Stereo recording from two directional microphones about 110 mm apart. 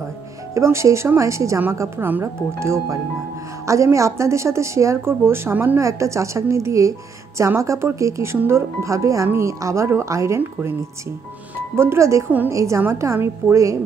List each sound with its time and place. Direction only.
0.6 s a woman's voice: 25° right (ahead or behind)
11.7 s a woman's voice: 25° right (ahead or behind)
12.3 s a woman's voice: 15° right (ahead or behind)
12.5 s a woman's voice: 25° right (ahead or behind)